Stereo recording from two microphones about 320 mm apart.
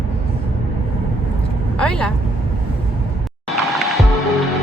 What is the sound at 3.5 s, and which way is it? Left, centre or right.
Music, centre.